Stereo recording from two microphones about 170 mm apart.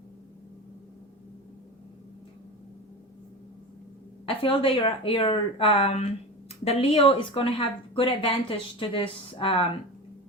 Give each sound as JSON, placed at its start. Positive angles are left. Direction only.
{"t": 4.3, "sound": "speech", "side_deg": 30}